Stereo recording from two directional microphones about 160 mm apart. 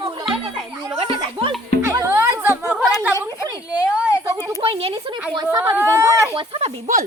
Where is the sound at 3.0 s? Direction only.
20° right (ahead or behind).